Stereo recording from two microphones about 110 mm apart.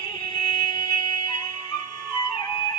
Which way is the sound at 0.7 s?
45° left (ahead or behind).